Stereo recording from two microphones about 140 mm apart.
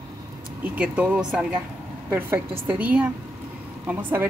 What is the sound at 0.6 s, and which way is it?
A woman's voice, 10° right (ahead or behind).